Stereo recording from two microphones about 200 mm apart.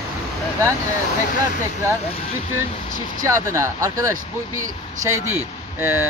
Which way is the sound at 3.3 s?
15° right (ahead or behind).